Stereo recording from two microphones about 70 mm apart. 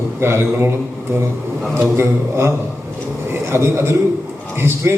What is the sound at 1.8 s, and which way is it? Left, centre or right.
A man's voice, right.